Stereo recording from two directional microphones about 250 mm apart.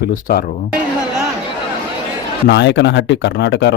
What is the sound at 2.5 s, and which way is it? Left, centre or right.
Speech, left.